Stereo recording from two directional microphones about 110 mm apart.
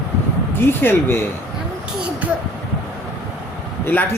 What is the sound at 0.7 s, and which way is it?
Speech, 20° left (ahead or behind).